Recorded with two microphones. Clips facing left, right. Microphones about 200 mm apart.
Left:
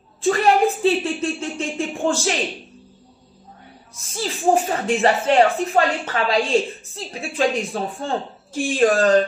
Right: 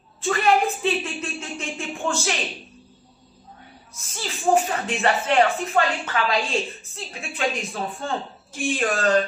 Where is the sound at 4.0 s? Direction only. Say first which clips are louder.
Left 6 dB; 30° left (ahead or behind).